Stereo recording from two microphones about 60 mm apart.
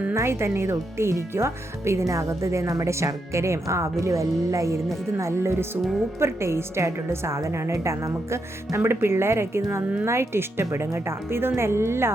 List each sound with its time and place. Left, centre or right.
0.1 s a woman's voice: right